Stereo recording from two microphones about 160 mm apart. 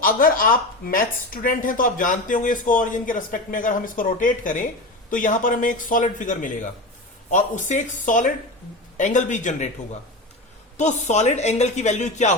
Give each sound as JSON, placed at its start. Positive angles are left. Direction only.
{"t": 0.0, "sound": "a woman's voice", "side_deg": 60}
{"t": 10.8, "sound": "a woman's voice", "side_deg": 45}